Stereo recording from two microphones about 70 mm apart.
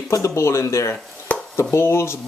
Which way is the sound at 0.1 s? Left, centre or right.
Left.